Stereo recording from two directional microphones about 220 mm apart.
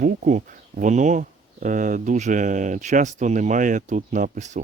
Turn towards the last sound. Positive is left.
turn(degrees=-35)  # may be behind; listen again after turning